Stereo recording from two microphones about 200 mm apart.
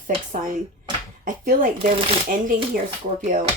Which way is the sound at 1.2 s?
45° right (ahead or behind).